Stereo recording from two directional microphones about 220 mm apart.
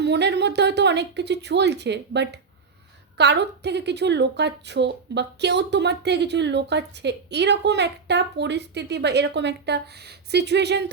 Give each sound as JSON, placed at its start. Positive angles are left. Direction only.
{"t": 0.0, "sound": "a woman's voice", "side_deg": -50}